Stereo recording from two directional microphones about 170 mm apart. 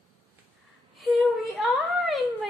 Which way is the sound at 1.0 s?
Centre (ahead or behind).